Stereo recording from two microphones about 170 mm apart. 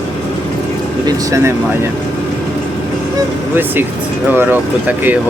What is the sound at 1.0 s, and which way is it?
Speech, 20° right (ahead or behind).